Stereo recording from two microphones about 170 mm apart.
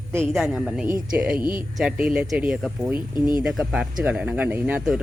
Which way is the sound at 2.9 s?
25° left (ahead or behind).